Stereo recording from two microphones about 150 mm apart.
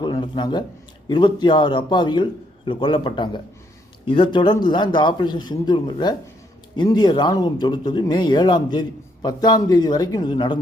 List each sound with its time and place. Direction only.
0.0 s speech: 30° left (ahead or behind)